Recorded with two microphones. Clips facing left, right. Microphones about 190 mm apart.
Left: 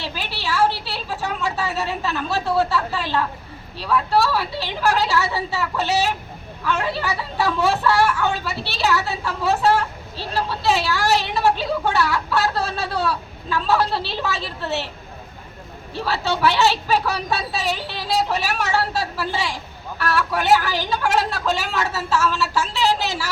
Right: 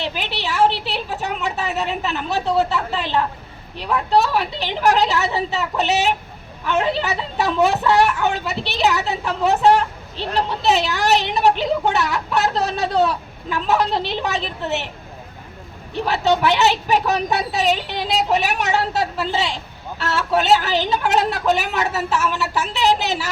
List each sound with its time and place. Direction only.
0.0 s speech: 20° right (ahead or behind)
16.0 s speech: 20° right (ahead or behind)